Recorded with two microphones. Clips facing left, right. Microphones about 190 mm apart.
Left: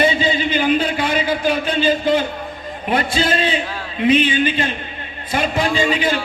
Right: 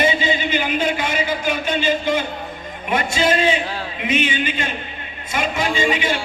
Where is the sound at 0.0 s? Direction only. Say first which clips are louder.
Left 2 dB; 30° left (ahead or behind).